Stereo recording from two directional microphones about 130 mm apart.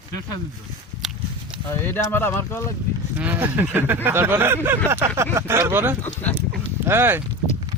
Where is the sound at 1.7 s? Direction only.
20° left (ahead or behind).